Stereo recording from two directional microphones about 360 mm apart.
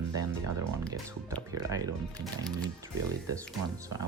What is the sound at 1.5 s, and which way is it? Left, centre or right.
Speech, centre.